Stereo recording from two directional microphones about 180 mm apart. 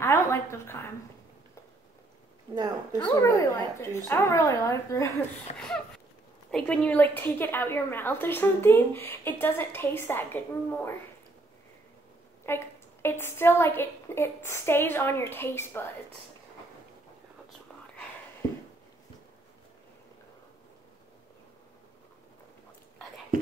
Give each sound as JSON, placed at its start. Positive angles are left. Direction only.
{"t": 0.0, "sound": "a sound", "side_deg": 15}
{"t": 2.5, "sound": "a woman's voice", "side_deg": -20}
{"t": 3.2, "sound": "a woman's voice", "side_deg": 15}
{"t": 5.5, "sound": "a sound", "side_deg": 40}
{"t": 6.5, "sound": "a woman's voice", "side_deg": 5}
{"t": 12.4, "sound": "a woman's voice", "side_deg": 15}